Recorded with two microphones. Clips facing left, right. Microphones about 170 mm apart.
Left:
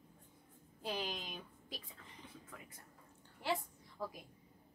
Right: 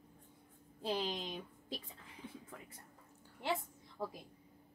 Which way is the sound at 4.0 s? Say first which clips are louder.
Right 2 dB; 25° right (ahead or behind).